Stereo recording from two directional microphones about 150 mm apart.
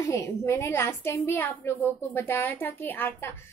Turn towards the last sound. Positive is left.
turn(degrees=15)  # may be behind; listen again after turning